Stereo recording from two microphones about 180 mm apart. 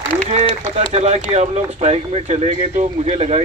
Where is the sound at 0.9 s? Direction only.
40° right (ahead or behind).